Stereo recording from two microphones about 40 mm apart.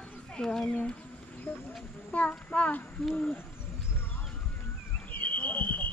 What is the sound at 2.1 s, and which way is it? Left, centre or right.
Speech, left.